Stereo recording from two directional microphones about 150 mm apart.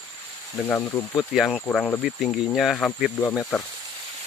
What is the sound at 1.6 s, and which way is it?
Speech, 10° left (ahead or behind).